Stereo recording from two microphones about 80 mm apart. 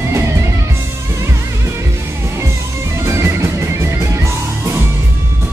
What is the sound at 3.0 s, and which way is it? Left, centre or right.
Music, right.